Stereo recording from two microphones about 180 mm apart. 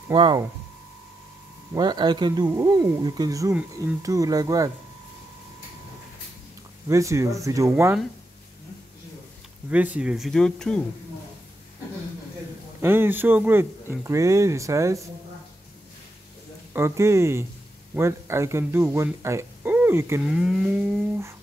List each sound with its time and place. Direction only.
0.1 s speech: 25° right (ahead or behind)
1.7 s speech: 25° right (ahead or behind)
6.9 s speech: 15° right (ahead or behind)
9.7 s speech: 5° right (ahead or behind)
12.8 s speech: 10° right (ahead or behind)
16.7 s speech: 15° right (ahead or behind)
20.2 s speech: 5° right (ahead or behind)